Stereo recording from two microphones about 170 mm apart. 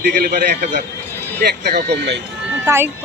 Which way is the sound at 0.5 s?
70° right (ahead or behind).